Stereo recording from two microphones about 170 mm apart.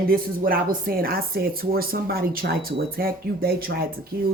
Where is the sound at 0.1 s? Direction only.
55° right (ahead or behind).